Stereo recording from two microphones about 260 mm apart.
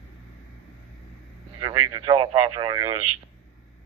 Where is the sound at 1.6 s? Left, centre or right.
Centre.